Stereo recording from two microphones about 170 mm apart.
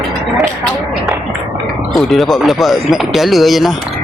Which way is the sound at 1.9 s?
Centre (ahead or behind).